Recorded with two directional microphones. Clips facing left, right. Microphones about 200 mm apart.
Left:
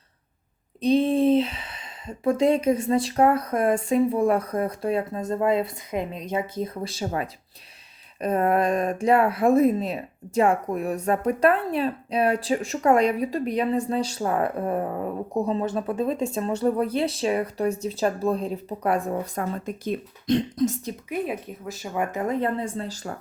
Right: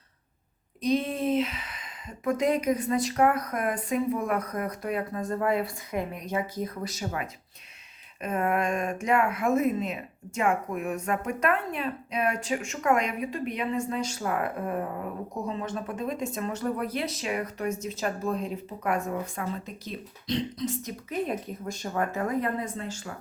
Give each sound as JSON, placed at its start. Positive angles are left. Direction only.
{"t": 0.8, "sound": "speech", "side_deg": 30}
{"t": 21.1, "sound": "speech", "side_deg": 5}